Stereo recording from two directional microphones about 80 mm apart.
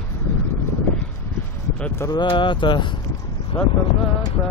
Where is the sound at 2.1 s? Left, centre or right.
Left.